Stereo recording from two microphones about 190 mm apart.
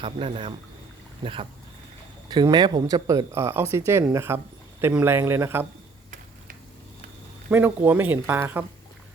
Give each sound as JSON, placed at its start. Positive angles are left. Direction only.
{"t": 0.0, "sound": "a man's voice", "side_deg": -25}
{"t": 7.5, "sound": "speech", "side_deg": -10}